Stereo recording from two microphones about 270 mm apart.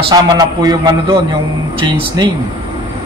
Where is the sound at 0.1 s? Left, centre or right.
Centre.